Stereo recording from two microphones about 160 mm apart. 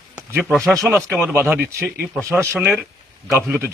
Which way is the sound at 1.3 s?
10° right (ahead or behind).